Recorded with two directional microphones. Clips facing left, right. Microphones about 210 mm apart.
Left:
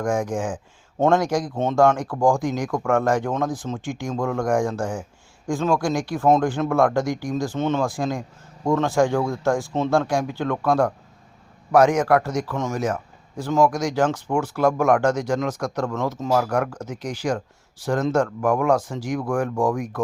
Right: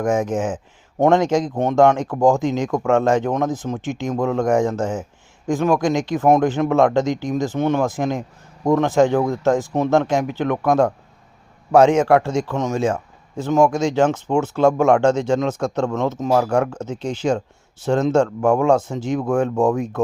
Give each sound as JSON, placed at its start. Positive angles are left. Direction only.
{"t": 0.0, "sound": "a man's voice", "side_deg": -20}